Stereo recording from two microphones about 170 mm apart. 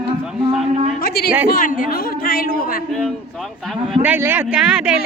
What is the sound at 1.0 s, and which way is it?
Speech, 65° left (ahead or behind).